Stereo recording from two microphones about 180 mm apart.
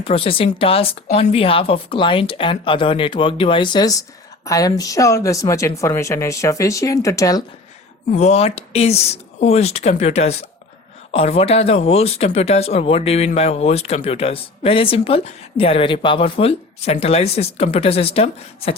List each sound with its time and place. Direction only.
0.0 s speech: 30° left (ahead or behind)
8.1 s speech: 40° left (ahead or behind)